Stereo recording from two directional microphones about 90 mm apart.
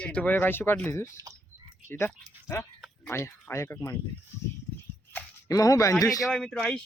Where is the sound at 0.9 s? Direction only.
30° left (ahead or behind).